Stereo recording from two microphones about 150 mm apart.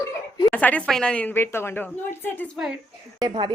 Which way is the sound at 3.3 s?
30° right (ahead or behind).